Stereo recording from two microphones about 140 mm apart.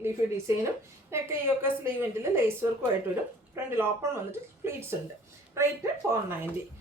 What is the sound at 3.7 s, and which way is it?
A woman's voice, 20° right (ahead or behind).